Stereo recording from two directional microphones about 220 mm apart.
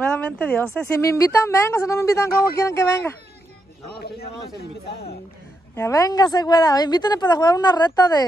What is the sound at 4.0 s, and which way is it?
Speech, 45° left (ahead or behind).